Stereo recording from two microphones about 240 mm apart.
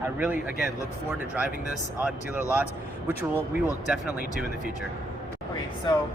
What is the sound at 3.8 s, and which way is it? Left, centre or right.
Speech, centre.